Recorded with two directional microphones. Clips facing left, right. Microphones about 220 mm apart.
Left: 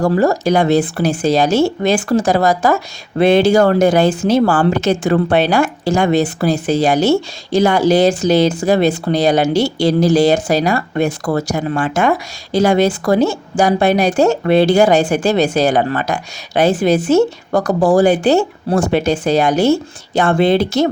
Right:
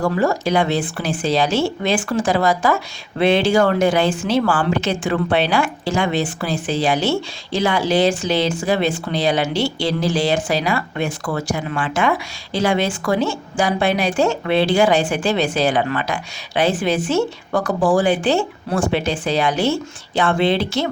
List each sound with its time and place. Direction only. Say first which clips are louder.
0.0 s speech: left 5 dB; 40° left (ahead or behind)